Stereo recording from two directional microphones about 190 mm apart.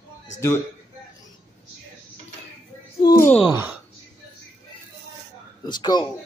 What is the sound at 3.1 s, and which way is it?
Speech, 15° left (ahead or behind).